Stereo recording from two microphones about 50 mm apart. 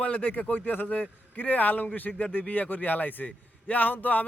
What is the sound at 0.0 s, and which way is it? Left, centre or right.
Speech, left.